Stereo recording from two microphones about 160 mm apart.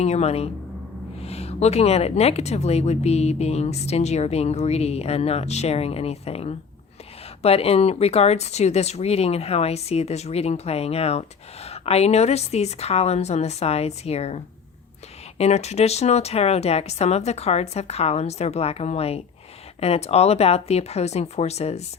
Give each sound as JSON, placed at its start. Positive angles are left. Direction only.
{"t": 0.0, "sound": "speech", "side_deg": 40}